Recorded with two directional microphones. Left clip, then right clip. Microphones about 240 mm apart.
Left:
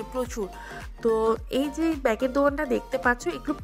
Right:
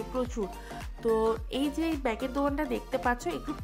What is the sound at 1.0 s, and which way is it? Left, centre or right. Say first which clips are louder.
Speech: left 4 dB; centre.